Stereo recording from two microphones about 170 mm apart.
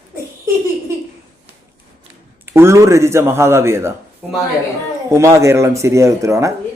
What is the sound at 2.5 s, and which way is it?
Speech, 15° right (ahead or behind).